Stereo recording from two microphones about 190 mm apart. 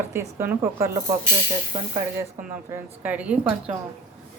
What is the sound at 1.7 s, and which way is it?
Speech, 35° right (ahead or behind).